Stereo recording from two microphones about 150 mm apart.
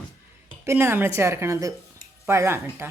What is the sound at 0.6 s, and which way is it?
A woman's voice, 15° right (ahead or behind).